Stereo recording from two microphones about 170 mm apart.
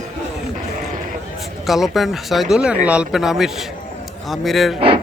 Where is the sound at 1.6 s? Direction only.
Centre (ahead or behind).